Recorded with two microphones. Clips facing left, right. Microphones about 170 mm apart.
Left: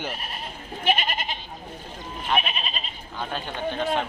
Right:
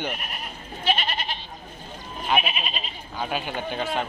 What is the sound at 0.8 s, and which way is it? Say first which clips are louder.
Goat: left 1 dB; 50° left (ahead or behind).